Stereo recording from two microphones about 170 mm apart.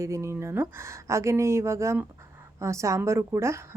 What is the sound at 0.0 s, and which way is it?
Speech, 15° right (ahead or behind).